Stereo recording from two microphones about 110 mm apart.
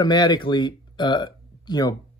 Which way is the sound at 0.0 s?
40° left (ahead or behind).